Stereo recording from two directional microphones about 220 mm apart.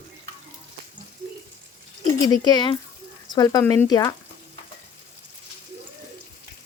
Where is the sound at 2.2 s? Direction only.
15° left (ahead or behind).